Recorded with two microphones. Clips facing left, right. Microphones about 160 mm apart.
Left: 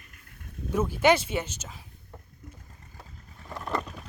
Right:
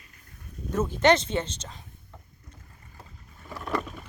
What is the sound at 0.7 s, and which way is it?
Speech, 10° left (ahead or behind).